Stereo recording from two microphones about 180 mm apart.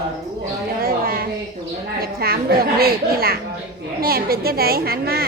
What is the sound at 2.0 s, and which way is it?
A woman's voice, 60° right (ahead or behind).